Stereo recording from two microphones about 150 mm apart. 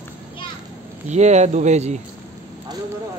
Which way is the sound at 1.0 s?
50° right (ahead or behind).